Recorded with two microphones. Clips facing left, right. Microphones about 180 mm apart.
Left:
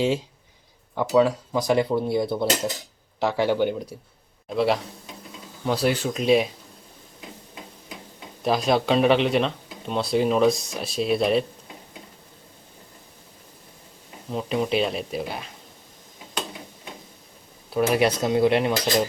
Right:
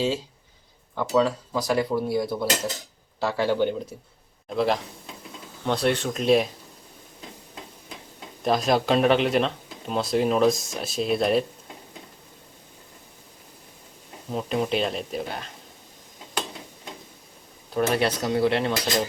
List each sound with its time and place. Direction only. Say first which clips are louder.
0.9 s speech: left 3 dB; 15° left (ahead or behind)
4.4 s a man's voice: left 1 dB; centre (ahead or behind)
8.4 s speech: left 1 dB; centre (ahead or behind)
14.3 s speech: left 1 dB; centre (ahead or behind)
17.7 s speech: left 2 dB; 10° left (ahead or behind)
18.2 s speech: left 3 dB; 20° left (ahead or behind)